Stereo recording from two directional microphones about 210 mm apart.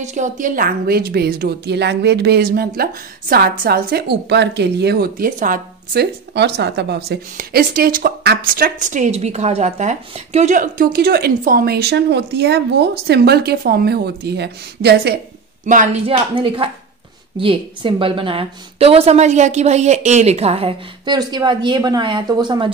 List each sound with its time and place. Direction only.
0.0 s a woman's voice: 35° right (ahead or behind); by 15.1 s 50° right (ahead or behind)
15.6 s a woman's voice: 35° right (ahead or behind)